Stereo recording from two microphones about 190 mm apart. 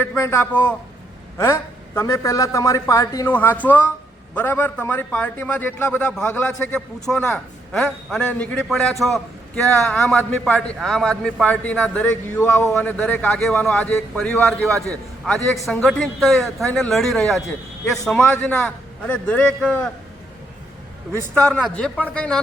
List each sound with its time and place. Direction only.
0.0 s a man's voice: 10° left (ahead or behind)
2.0 s a man's voice: 15° left (ahead or behind)
21.3 s a man's voice: 5° left (ahead or behind)